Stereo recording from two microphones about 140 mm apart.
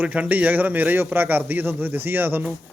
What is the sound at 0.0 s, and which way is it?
A man's voice, 10° right (ahead or behind).